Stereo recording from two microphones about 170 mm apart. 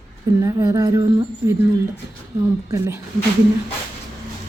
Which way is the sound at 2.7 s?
20° right (ahead or behind).